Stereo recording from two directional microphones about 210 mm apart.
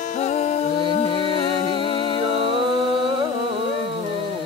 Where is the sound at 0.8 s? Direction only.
25° left (ahead or behind).